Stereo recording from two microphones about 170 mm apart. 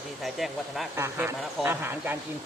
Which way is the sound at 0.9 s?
15° right (ahead or behind).